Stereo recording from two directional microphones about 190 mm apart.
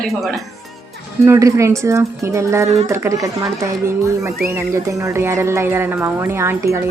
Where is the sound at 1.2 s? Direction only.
15° right (ahead or behind).